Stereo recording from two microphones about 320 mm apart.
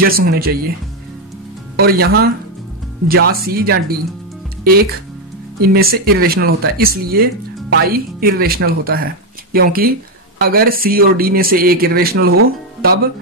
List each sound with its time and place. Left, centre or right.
0.0 s speech: right
1.8 s speech: right
5.6 s speech: right